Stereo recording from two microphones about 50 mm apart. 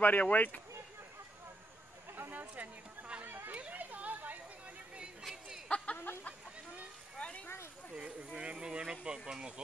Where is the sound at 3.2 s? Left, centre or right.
Right.